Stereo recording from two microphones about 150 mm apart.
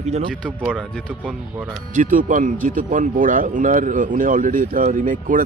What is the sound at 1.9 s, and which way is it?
Speech, 60° right (ahead or behind).